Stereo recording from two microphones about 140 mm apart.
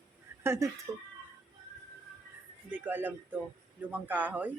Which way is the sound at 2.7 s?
15° right (ahead or behind).